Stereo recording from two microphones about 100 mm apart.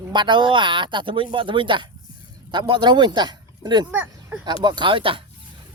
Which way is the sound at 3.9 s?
15° right (ahead or behind).